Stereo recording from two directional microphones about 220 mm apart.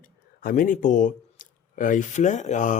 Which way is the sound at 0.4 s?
40° left (ahead or behind).